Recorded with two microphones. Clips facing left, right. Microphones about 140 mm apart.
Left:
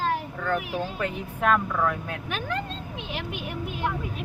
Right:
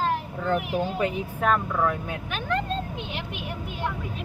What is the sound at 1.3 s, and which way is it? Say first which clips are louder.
Speech: left 1 dB; 5° right (ahead or behind).